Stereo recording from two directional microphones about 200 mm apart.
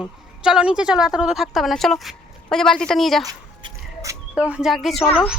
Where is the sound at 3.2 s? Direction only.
15° right (ahead or behind).